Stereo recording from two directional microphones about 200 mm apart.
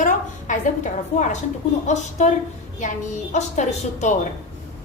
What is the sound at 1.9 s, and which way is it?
Speech, 35° left (ahead or behind).